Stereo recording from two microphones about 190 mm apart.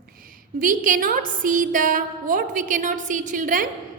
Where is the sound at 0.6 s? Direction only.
45° right (ahead or behind).